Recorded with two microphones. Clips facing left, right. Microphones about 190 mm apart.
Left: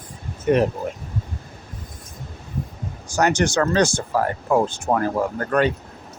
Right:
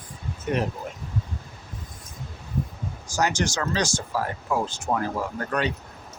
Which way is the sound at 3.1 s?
60° left (ahead or behind).